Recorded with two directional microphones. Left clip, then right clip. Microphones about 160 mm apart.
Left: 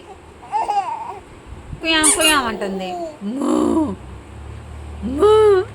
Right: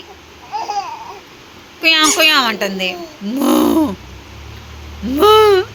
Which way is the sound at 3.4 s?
10° right (ahead or behind).